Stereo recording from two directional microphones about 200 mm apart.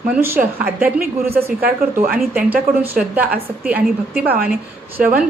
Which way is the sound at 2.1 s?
5° right (ahead or behind).